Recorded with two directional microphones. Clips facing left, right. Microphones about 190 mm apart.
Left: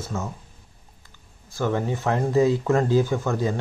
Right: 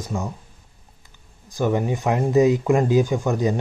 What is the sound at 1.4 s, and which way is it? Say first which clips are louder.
Speech: right 3 dB; 15° right (ahead or behind).